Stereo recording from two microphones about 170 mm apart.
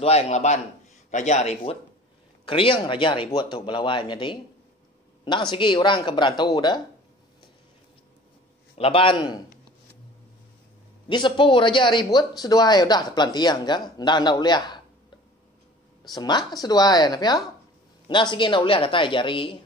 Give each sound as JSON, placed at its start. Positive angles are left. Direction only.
{"t": 0.0, "sound": "a man's voice", "side_deg": 40}
{"t": 5.5, "sound": "speech", "side_deg": 30}
{"t": 8.7, "sound": "a man's voice", "side_deg": 35}
{"t": 11.1, "sound": "speech", "side_deg": 25}
{"t": 16.0, "sound": "speech", "side_deg": 25}